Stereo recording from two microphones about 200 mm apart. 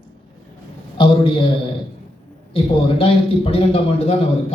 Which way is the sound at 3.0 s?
30° left (ahead or behind).